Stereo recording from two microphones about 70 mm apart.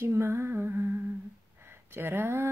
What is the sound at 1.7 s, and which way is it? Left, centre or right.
Speech, right.